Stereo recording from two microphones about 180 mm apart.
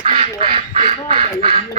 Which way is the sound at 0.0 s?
35° right (ahead or behind).